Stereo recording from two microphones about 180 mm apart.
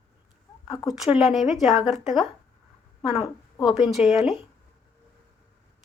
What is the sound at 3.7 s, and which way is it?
Speech, centre (ahead or behind).